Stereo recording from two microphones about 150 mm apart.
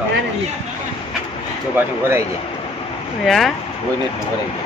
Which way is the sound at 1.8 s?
15° right (ahead or behind).